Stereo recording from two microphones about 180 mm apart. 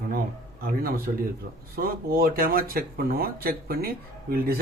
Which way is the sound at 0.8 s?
55° right (ahead or behind).